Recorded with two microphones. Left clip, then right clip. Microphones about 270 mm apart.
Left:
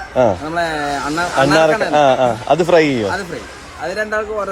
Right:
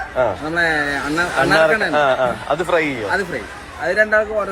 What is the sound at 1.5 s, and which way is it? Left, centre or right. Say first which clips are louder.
A man's voice: left 1 dB; left.